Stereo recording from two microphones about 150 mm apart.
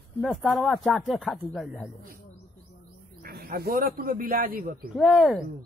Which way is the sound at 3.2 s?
90° right.